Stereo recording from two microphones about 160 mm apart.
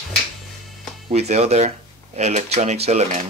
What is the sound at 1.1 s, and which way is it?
Speech, 45° right (ahead or behind).